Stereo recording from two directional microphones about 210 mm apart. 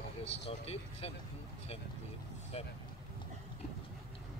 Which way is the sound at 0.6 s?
30° left (ahead or behind).